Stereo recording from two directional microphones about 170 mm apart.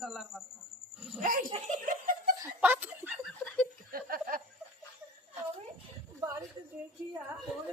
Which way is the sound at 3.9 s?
60° right (ahead or behind).